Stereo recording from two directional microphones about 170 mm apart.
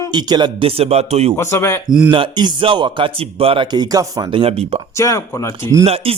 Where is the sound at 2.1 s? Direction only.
25° right (ahead or behind).